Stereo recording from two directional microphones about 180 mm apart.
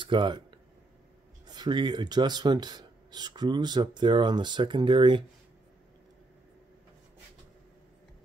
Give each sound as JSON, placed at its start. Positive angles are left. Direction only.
{"t": 0.0, "sound": "speech", "side_deg": -25}